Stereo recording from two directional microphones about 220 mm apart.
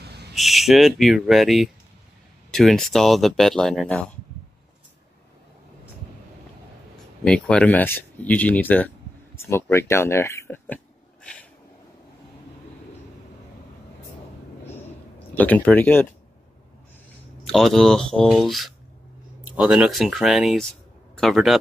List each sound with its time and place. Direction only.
0.0 s a sound: 50° right (ahead or behind)
0.3 s speech: centre (ahead or behind)
7.2 s speech: 5° left (ahead or behind)
15.3 s speech: 5° left (ahead or behind)
17.5 s speech: centre (ahead or behind)